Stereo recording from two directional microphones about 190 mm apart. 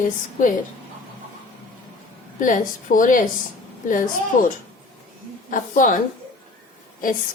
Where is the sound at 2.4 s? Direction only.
45° left (ahead or behind).